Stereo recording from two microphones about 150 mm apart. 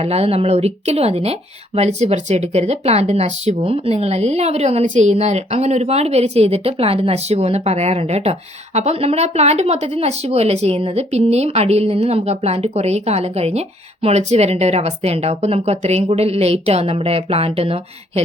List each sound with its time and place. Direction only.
0.0 s speech: 45° right (ahead or behind)